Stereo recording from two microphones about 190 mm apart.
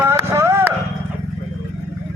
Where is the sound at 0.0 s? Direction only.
15° right (ahead or behind).